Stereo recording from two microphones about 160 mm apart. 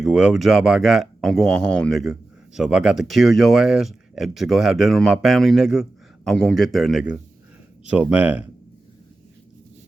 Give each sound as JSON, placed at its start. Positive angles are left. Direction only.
{"t": 0.0, "sound": "speech", "side_deg": -5}